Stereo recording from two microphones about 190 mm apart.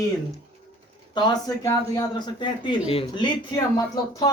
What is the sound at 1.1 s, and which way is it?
Speech, 20° left (ahead or behind).